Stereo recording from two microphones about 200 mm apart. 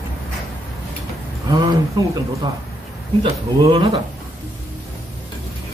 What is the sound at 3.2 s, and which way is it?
Speech, 30° right (ahead or behind).